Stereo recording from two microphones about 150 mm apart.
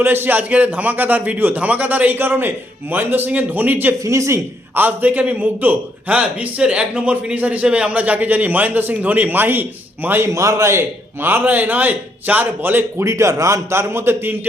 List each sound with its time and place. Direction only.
0.0 s a man's voice: 15° right (ahead or behind)